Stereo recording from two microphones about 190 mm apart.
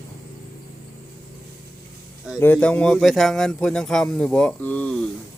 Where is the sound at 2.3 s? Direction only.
10° left (ahead or behind).